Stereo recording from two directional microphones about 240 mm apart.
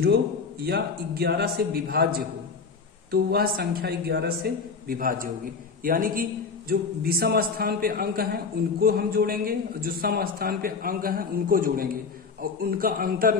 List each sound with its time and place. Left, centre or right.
0.0 s a man's voice: right